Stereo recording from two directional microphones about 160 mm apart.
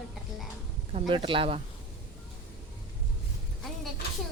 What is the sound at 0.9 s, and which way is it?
Speech, 30° right (ahead or behind).